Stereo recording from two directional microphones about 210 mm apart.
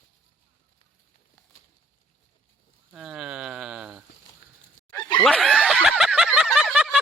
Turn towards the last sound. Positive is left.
turn(degrees=-5)  # may be behind; listen again after turning